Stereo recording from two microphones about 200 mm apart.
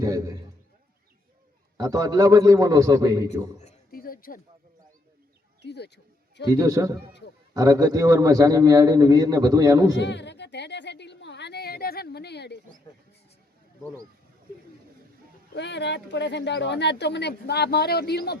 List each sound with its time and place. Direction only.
0.0 s a man's voice: 20° right (ahead or behind)
1.8 s a man's voice: 20° right (ahead or behind)
3.6 s a sound: 40° left (ahead or behind)
5.6 s speech: 55° left (ahead or behind)
6.5 s a man's voice: 15° right (ahead or behind)
10.0 s speech: 60° left (ahead or behind)
15.5 s speech: 60° left (ahead or behind)